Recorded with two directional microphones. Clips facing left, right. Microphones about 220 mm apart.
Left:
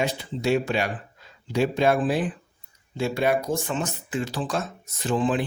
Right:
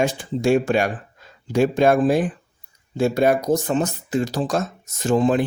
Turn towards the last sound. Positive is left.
turn(degrees=-45)  # may be behind; listen again after turning